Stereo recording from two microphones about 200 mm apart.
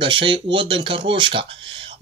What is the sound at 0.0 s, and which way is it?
Speech, 25° right (ahead or behind).